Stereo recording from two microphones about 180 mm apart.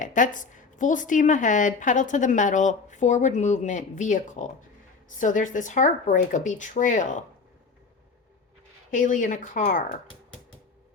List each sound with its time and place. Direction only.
0.0 s a woman's voice: 45° left (ahead or behind)
8.9 s a woman's voice: 45° left (ahead or behind)